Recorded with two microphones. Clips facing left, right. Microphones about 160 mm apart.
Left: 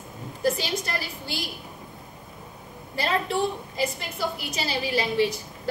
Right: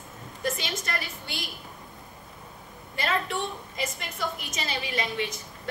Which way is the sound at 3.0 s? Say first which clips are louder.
Left 3 dB; 30° left (ahead or behind).